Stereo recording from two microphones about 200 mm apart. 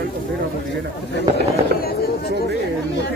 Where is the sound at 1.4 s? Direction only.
50° left (ahead or behind).